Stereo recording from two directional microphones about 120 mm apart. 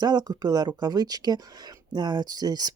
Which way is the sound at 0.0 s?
35° right (ahead or behind).